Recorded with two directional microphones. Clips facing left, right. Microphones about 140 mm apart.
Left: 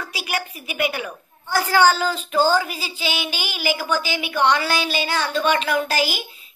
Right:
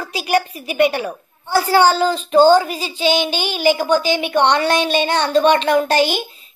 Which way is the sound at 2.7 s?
10° left (ahead or behind).